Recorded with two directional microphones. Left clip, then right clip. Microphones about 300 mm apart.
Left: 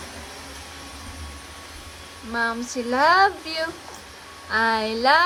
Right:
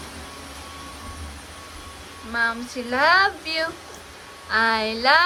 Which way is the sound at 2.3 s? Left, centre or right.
Centre.